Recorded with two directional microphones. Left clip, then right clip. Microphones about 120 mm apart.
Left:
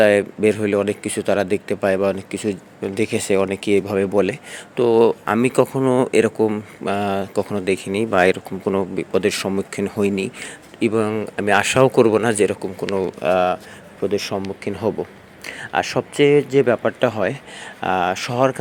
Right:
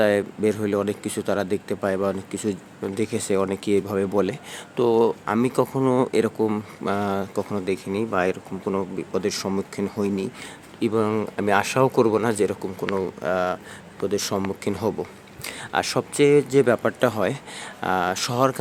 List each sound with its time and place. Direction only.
0.0 s speech: 10° left (ahead or behind)
4.9 s speech: 20° left (ahead or behind)
10.4 s speech: 10° left (ahead or behind)
14.1 s speech: centre (ahead or behind)